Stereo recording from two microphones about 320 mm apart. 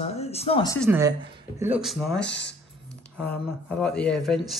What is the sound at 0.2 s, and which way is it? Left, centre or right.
Speech, centre.